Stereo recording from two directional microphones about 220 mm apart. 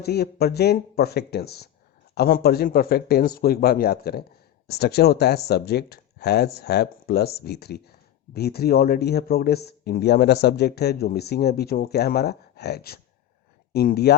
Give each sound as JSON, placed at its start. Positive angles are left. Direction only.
{"t": 0.0, "sound": "speech", "side_deg": 45}